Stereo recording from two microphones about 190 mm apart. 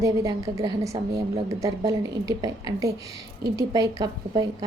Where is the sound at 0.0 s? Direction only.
15° right (ahead or behind).